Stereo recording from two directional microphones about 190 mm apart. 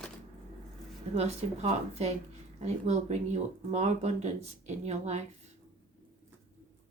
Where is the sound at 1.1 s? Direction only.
35° right (ahead or behind).